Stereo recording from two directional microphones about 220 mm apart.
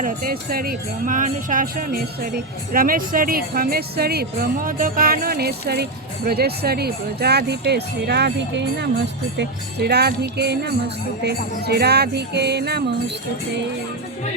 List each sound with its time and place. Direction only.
0.0 s speech: 40° right (ahead or behind)